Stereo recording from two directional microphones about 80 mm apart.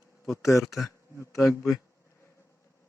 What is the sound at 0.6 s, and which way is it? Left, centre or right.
Speech, centre.